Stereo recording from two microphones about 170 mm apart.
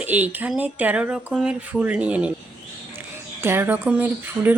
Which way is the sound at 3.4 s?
15° right (ahead or behind).